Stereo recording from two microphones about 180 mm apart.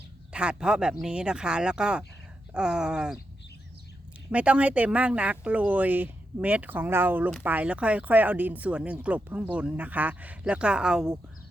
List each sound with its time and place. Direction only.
0.3 s speech: 5° right (ahead or behind)
4.3 s speech: 5° right (ahead or behind)